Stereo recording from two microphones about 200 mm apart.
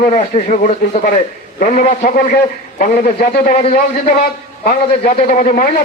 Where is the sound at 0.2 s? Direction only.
35° left (ahead or behind).